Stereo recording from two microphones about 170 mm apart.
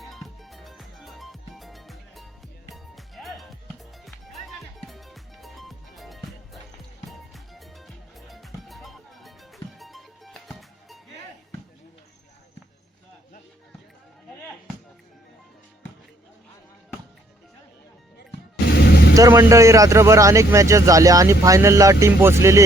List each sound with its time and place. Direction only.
0.0 s music: centre (ahead or behind)
18.2 s music: 70° left (ahead or behind)
19.1 s speech: 20° right (ahead or behind)